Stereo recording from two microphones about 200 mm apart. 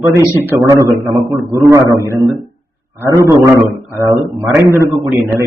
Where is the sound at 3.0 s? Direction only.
15° right (ahead or behind).